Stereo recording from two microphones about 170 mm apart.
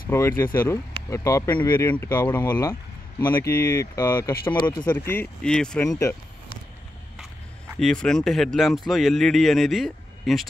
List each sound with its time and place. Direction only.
0.1 s speech: 15° left (ahead or behind)
7.8 s a man's voice: 5° left (ahead or behind)